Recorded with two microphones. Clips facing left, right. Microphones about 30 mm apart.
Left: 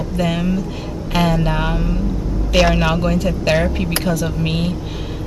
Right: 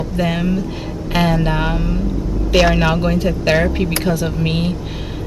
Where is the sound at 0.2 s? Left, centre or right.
Centre.